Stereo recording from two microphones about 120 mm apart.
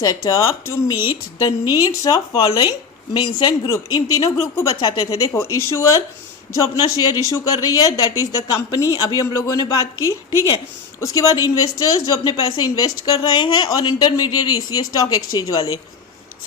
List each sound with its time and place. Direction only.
0.0 s speech: 25° left (ahead or behind); by 3.5 s 45° left (ahead or behind)
3.7 s speech: 30° left (ahead or behind)